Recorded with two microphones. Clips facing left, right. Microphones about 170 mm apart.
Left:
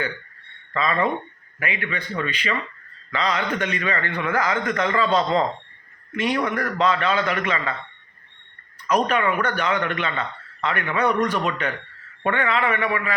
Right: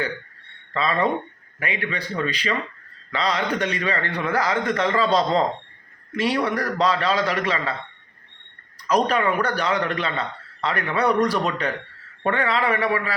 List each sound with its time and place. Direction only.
0.7 s a man's voice: 35° right (ahead or behind)
8.9 s a man's voice: 35° right (ahead or behind)